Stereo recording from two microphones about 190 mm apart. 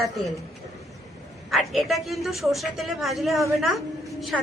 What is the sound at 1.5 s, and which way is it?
A woman's voice, centre (ahead or behind).